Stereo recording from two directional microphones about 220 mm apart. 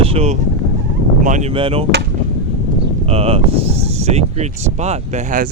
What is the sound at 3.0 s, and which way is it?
Speech, 25° right (ahead or behind).